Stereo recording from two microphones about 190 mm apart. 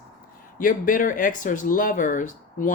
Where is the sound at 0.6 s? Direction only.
45° left (ahead or behind).